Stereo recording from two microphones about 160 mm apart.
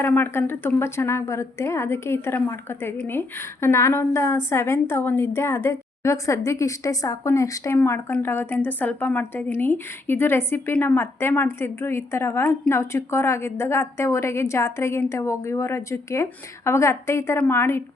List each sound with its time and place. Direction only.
0.0 s speech: 10° left (ahead or behind)